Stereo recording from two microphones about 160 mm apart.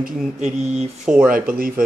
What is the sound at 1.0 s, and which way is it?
Speech, 5° right (ahead or behind).